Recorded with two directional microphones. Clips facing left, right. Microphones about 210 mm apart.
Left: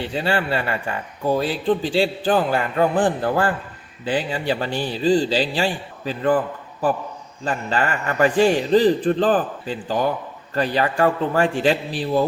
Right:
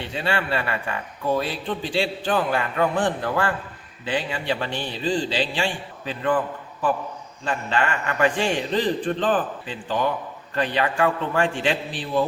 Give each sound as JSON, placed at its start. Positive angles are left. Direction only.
{"t": 0.1, "sound": "speech", "side_deg": 35}
{"t": 7.4, "sound": "speech", "side_deg": 35}